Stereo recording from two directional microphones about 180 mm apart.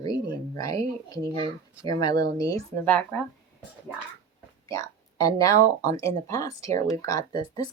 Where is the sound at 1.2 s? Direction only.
30° right (ahead or behind).